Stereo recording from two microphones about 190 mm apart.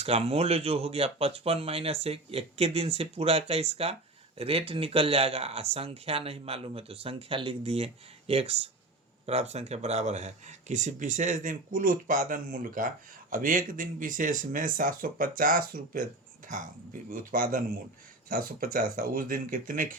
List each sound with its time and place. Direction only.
0.0 s speech: 30° right (ahead or behind)
17.1 s speech: 45° right (ahead or behind)